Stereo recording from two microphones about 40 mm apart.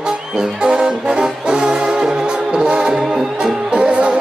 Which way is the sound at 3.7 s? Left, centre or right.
Right.